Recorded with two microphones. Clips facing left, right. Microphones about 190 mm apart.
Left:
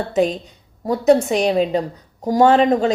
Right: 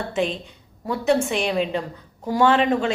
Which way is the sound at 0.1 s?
40° left (ahead or behind).